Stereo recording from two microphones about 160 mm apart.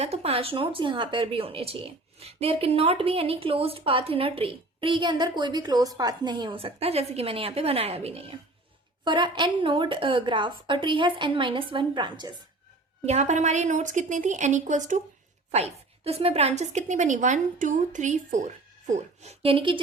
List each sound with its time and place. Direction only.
0.0 s a woman's voice: 40° right (ahead or behind)
13.1 s a woman's voice: 45° right (ahead or behind)